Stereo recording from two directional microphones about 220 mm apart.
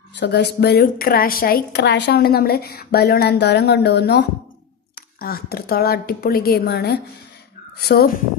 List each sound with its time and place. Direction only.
0.1 s a woman's voice: 50° left (ahead or behind)